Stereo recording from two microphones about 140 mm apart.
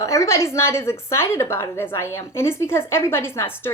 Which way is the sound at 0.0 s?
20° left (ahead or behind).